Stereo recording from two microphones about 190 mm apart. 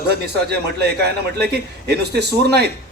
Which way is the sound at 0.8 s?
60° right (ahead or behind).